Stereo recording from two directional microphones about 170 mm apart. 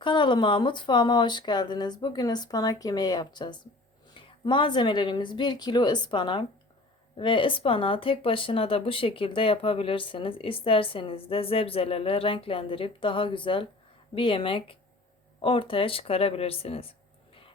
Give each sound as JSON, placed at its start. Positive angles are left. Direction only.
{"t": 0.0, "sound": "speech", "side_deg": 30}